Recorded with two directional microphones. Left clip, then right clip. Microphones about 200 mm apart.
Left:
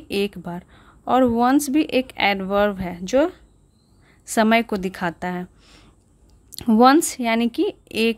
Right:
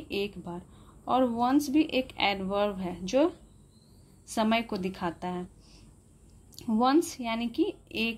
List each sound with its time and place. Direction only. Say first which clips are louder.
0.1 s a woman's voice: left 9 dB; 35° left (ahead or behind)